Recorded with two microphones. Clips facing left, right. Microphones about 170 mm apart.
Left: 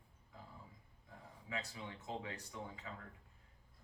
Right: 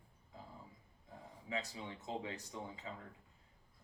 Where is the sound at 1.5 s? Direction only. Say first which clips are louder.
Right 3 dB; 25° right (ahead or behind).